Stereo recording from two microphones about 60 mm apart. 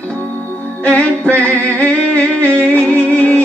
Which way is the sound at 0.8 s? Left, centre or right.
Left.